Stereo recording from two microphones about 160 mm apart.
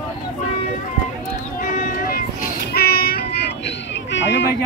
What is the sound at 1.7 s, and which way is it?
Child singing, 55° left (ahead or behind).